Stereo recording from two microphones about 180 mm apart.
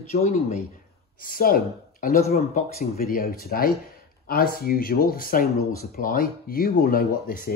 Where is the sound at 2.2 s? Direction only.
35° left (ahead or behind).